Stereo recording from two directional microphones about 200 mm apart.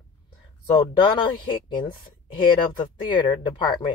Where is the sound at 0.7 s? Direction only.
25° left (ahead or behind).